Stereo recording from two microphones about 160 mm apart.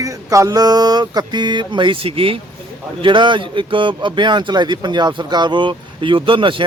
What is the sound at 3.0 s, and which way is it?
Speech, 30° right (ahead or behind).